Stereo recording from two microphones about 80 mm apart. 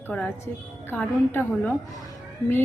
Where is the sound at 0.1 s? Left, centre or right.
Centre.